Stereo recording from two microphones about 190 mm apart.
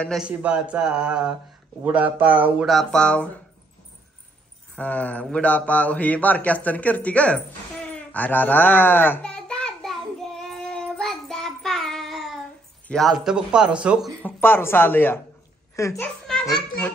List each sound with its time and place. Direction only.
0.0 s speech: centre (ahead or behind)
4.7 s a man's voice: 10° left (ahead or behind)
7.9 s a sound: 10° left (ahead or behind)
12.8 s speech: centre (ahead or behind)
14.2 s a man's voice: 10° left (ahead or behind)
16.3 s children playing: centre (ahead or behind)